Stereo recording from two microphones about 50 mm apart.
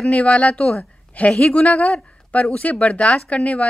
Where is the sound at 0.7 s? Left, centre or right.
Left.